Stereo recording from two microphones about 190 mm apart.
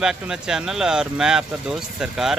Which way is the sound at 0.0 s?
5° right (ahead or behind).